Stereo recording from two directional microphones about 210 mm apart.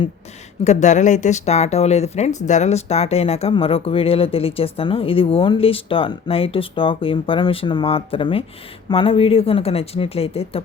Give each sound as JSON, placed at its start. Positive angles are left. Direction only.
{"t": 0.6, "sound": "speech", "side_deg": 35}